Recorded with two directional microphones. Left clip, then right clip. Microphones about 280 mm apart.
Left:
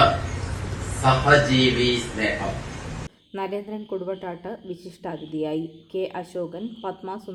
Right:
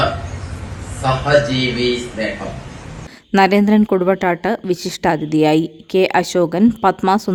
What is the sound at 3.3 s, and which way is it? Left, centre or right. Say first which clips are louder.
A woman's voice: right 17 dB; right.